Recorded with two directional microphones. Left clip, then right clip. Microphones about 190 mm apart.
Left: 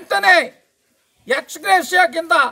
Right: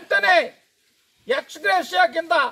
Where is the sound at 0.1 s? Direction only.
15° left (ahead or behind).